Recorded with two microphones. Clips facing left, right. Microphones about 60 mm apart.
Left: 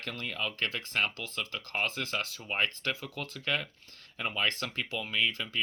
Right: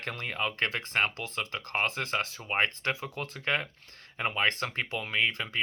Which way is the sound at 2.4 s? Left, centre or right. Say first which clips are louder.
Right 2 dB; right.